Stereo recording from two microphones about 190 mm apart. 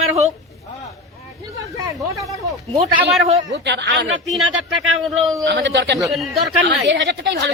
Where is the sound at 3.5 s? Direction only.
65° right (ahead or behind).